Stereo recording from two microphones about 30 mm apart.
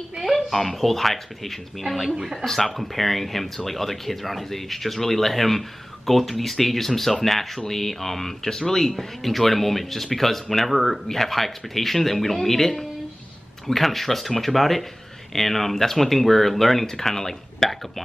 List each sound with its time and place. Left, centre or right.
0.2 s a sound: centre
0.7 s speech: centre
8.7 s speech: centre